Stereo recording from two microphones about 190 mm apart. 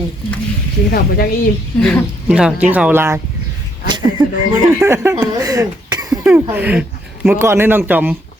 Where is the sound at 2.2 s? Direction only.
5° right (ahead or behind).